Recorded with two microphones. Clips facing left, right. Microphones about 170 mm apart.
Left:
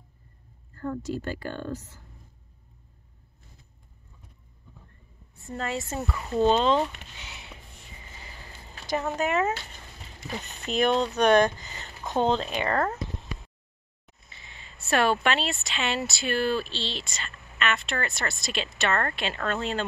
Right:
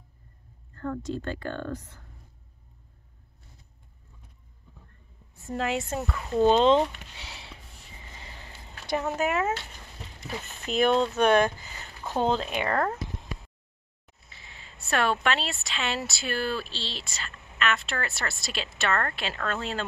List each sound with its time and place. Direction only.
0.7 s speech: 10° left (ahead or behind)
5.3 s speech: centre (ahead or behind)
6.4 s speech: 20° right (ahead or behind)
8.9 s speech: 5° right (ahead or behind)
12.7 s speech: 5° left (ahead or behind)
14.2 s speech: centre (ahead or behind)